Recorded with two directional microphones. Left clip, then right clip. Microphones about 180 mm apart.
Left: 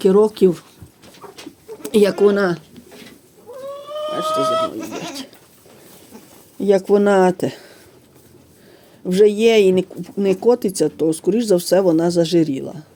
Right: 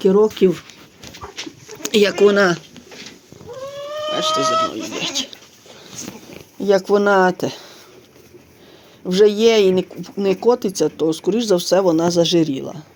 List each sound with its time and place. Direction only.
0.0 s speech: 10° left (ahead or behind)
1.8 s speech: 10° left (ahead or behind)
4.1 s speech: 10° left (ahead or behind)
6.7 s speech: 35° left (ahead or behind)
9.0 s speech: 30° left (ahead or behind)